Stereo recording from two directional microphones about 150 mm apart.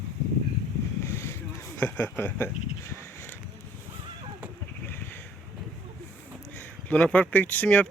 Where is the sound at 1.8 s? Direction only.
15° left (ahead or behind).